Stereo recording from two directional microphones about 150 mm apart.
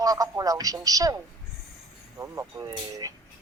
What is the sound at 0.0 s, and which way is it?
Speech, 25° right (ahead or behind).